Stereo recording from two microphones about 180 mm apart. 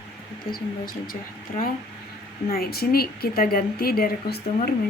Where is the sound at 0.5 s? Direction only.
55° left (ahead or behind).